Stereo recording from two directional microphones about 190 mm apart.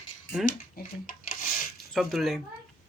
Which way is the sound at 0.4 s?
45° left (ahead or behind).